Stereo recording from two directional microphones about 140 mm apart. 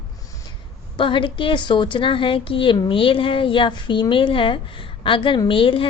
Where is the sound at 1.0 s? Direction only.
35° left (ahead or behind).